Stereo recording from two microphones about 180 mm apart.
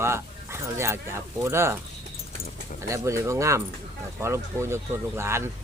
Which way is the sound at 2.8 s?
15° right (ahead or behind).